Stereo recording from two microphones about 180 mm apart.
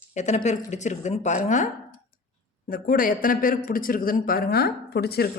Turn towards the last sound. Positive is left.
turn(degrees=60)  # may be behind; listen again after turning